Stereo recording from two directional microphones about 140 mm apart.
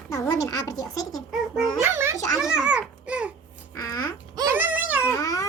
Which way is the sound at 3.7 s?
25° left (ahead or behind).